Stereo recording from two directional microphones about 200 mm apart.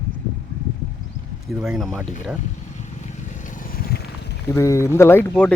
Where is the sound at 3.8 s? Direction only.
50° left (ahead or behind).